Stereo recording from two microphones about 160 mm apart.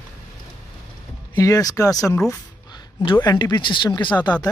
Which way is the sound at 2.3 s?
25° left (ahead or behind).